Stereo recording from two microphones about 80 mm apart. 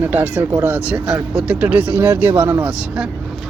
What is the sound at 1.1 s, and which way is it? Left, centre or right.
Speech, centre.